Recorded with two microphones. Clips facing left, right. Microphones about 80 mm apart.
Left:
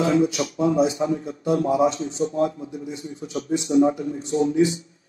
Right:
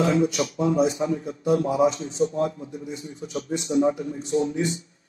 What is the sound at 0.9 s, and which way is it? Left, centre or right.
A man's voice, left.